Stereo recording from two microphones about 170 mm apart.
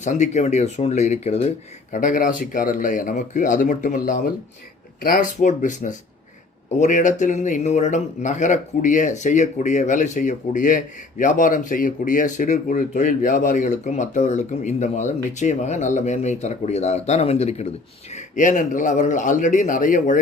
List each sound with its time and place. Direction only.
0.0 s speech: 45° left (ahead or behind)